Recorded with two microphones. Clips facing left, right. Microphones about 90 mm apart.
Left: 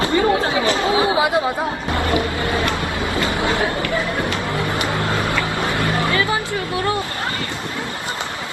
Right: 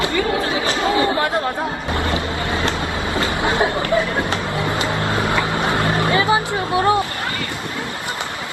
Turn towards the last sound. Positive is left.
turn(degrees=-20)  # may be behind; listen again after turning